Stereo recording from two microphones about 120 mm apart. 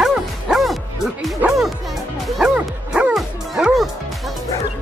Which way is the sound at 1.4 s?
Centre (ahead or behind).